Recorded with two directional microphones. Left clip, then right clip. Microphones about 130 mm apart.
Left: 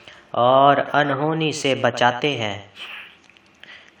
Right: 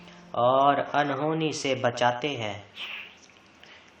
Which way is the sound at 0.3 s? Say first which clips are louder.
Left 7 dB; 30° left (ahead or behind).